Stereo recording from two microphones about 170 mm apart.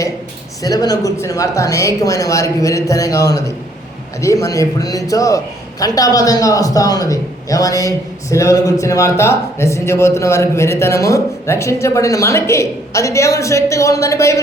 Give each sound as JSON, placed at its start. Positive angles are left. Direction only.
{"t": 0.6, "sound": "a man's voice", "side_deg": 20}